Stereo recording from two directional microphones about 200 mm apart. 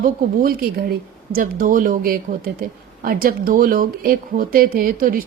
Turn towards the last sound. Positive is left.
turn(degrees=-45)  # may be behind; listen again after turning